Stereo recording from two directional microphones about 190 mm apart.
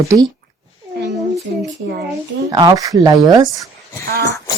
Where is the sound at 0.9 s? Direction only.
65° right (ahead or behind).